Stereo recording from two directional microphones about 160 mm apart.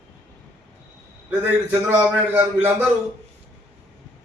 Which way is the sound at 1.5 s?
10° right (ahead or behind).